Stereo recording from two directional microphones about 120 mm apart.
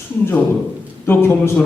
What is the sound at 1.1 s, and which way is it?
Speech, 20° left (ahead or behind).